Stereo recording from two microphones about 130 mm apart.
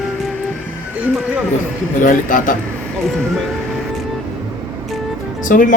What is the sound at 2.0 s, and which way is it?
Speech, 90° left.